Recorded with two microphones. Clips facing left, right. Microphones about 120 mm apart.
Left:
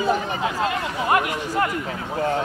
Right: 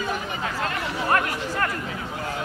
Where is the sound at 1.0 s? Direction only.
15° left (ahead or behind).